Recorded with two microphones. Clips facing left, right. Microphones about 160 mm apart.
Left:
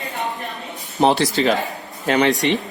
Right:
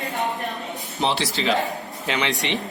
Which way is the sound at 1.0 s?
45° left (ahead or behind).